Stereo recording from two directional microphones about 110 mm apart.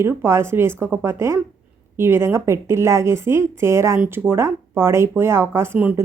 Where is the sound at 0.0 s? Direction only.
20° right (ahead or behind).